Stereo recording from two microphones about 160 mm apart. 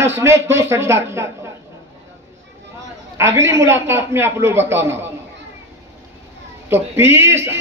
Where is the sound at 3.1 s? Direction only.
15° right (ahead or behind).